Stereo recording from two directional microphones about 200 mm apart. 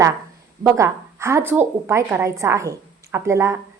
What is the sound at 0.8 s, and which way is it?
A woman's voice, 15° right (ahead or behind).